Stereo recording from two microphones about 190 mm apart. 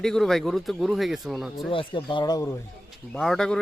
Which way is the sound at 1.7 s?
25° left (ahead or behind).